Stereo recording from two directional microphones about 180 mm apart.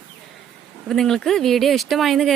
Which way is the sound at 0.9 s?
5° left (ahead or behind).